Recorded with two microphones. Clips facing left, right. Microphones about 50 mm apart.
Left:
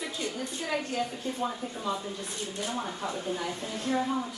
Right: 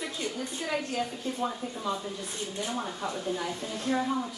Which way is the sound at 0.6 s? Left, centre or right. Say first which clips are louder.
Even; centre.